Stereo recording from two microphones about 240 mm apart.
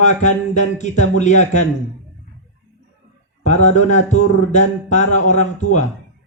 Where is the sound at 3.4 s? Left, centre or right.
Left.